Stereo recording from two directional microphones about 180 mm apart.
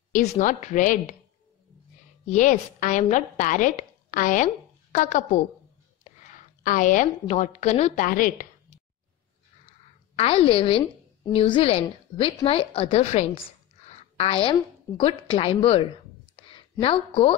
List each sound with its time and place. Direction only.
0.1 s a woman's voice: 40° left (ahead or behind)
2.2 s a woman's voice: 40° left (ahead or behind)
10.1 s a woman's voice: 30° left (ahead or behind)